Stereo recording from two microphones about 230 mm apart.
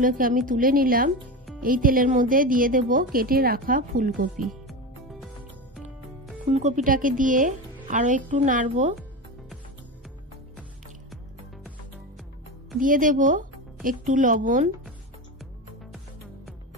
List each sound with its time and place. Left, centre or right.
0.0 s a woman's voice: right
6.5 s a woman's voice: right
12.8 s a woman's voice: right